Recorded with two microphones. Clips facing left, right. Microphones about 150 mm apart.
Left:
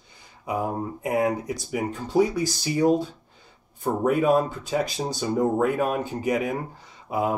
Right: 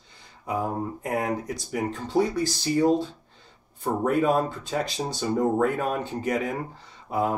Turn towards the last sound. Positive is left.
turn(degrees=5)  # may be behind; listen again after turning